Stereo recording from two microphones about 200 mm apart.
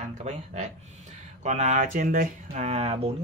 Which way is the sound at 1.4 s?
35° right (ahead or behind).